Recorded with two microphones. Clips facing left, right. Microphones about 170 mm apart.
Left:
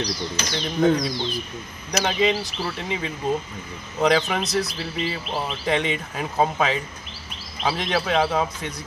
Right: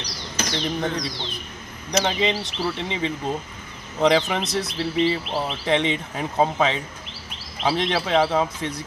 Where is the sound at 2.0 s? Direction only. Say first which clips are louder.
Left 1 dB; 25° right (ahead or behind).